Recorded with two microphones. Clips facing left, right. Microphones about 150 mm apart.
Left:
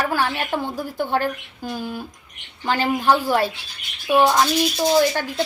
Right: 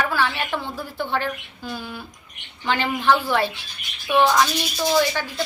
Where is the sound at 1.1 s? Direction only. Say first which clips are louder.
Left 3 dB; 45° left (ahead or behind).